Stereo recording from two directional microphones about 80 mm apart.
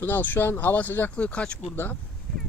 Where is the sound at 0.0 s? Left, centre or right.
Left.